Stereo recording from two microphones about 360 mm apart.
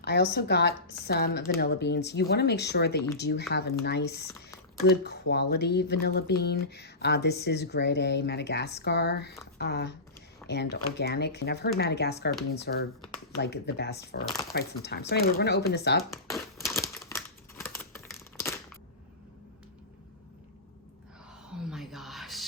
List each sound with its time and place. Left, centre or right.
0.0 s speech: left
16.1 s crumpling: centre
21.7 s music: centre